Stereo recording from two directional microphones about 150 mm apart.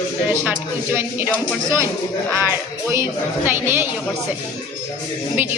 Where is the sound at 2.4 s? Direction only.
20° right (ahead or behind).